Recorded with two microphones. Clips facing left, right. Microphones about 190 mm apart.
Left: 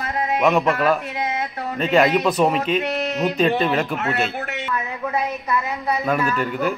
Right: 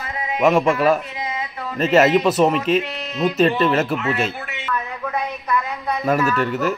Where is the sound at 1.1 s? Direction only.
65° left (ahead or behind).